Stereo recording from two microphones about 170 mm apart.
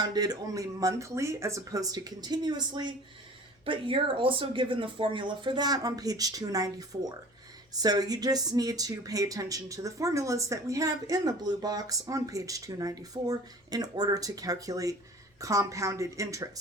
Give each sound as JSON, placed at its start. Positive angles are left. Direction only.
{"t": 0.0, "sound": "speech", "side_deg": -25}